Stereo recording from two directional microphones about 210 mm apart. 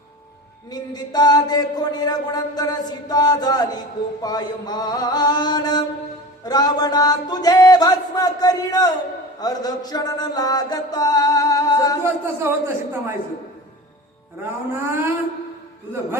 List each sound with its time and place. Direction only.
0.7 s a sound: 20° left (ahead or behind)
9.4 s music: 20° left (ahead or behind)
12.0 s speech: 10° right (ahead or behind)
14.7 s speech: 10° right (ahead or behind)